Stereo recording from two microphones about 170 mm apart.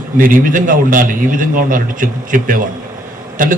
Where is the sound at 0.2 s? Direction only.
50° right (ahead or behind).